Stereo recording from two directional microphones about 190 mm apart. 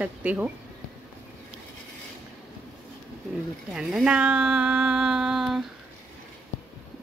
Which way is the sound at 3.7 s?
5° right (ahead or behind).